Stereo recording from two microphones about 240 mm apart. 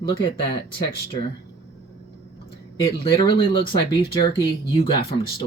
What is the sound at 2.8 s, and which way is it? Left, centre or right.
Speech, centre.